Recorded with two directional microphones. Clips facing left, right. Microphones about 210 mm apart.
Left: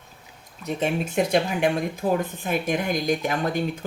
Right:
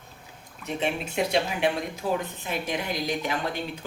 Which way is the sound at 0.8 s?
45° left (ahead or behind).